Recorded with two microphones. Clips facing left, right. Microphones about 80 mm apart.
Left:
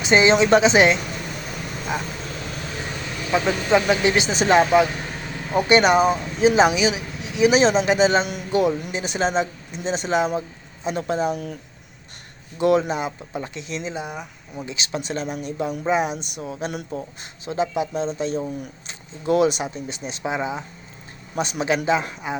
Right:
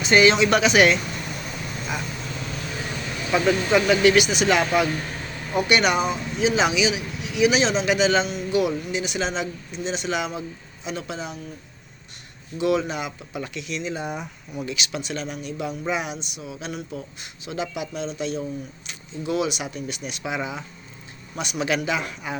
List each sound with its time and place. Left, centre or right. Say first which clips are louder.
0.0 s speech: left 1 dB; left
3.3 s speech: left 1 dB; left
4.6 s speech: left 5 dB; left
5.5 s a man's voice: left 4 dB; left
12.5 s speech: left 4 dB; left
13.0 s a man's voice: left 3 dB; left
13.9 s speech: right 1 dB; centre
14.5 s a man's voice: left 1 dB; left